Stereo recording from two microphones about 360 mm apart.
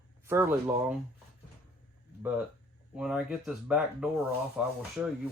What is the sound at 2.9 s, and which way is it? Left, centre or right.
Speech, centre.